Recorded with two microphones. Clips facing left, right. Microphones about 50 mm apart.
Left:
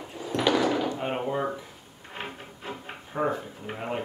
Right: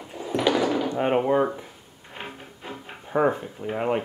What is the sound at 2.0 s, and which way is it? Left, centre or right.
Music, centre.